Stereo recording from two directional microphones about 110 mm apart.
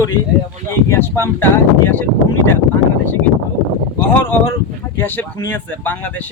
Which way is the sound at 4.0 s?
20° left (ahead or behind).